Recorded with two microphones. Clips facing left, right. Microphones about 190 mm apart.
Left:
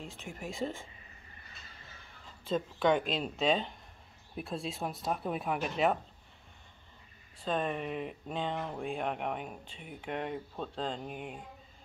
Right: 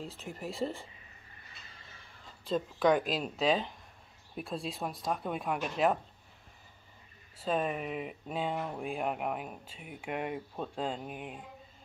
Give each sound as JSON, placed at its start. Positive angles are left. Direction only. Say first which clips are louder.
{"t": 0.0, "sound": "speech", "louder": "right 2 dB", "side_deg": -35}
{"t": 0.3, "sound": "speech", "louder": "right 1 dB", "side_deg": 0}
{"t": 2.4, "sound": "speech", "louder": "right 1 dB", "side_deg": 0}
{"t": 7.3, "sound": "speech", "louder": "right 1 dB", "side_deg": -5}